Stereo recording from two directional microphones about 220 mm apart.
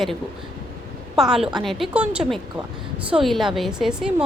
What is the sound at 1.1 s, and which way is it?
A woman's voice, centre (ahead or behind).